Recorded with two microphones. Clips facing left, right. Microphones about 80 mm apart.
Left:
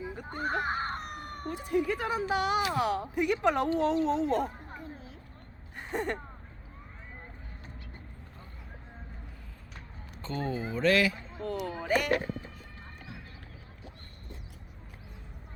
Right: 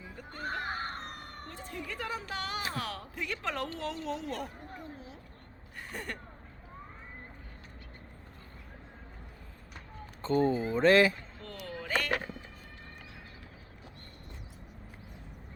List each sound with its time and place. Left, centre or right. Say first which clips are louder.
0.0 s screaming: left 6 dB; centre
2.7 s speech: left 9 dB; centre
5.7 s gasp: left 8 dB; left
10.2 s speech: right 6 dB; right
11.3 s a sound: left 8 dB; centre